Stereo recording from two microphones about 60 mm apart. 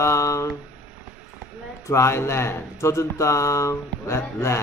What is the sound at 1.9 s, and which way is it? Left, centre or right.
Speech, left.